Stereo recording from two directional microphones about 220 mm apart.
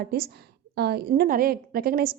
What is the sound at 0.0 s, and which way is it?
A woman's voice, 45° right (ahead or behind).